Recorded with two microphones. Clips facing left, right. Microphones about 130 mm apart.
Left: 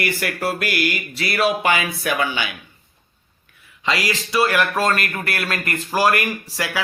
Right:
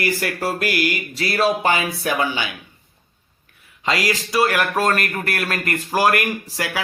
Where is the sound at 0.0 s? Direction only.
35° right (ahead or behind).